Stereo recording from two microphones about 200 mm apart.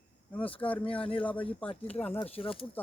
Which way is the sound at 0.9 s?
25° left (ahead or behind).